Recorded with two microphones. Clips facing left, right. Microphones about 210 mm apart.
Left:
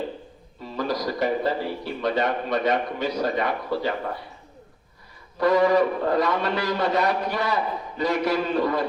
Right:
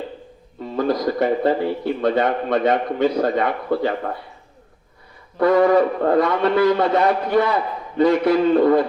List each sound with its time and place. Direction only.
0.8 s a man's voice: 55° right (ahead or behind)
5.4 s a man's voice: 55° right (ahead or behind)